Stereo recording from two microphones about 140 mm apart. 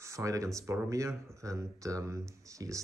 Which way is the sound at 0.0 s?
20° right (ahead or behind).